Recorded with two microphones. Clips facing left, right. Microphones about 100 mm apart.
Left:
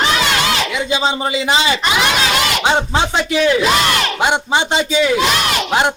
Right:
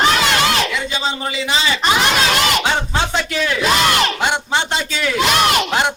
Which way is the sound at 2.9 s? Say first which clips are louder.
Left 3 dB; 15° left (ahead or behind).